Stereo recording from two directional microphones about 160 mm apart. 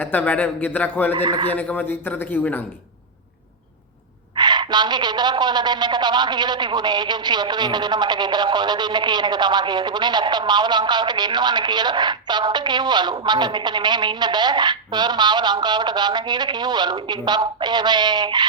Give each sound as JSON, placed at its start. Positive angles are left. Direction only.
{"t": 0.0, "sound": "speech", "side_deg": 10}
{"t": 1.1, "sound": "a woman's voice", "side_deg": -30}
{"t": 1.5, "sound": "speech", "side_deg": 10}
{"t": 4.4, "sound": "a woman's voice", "side_deg": -25}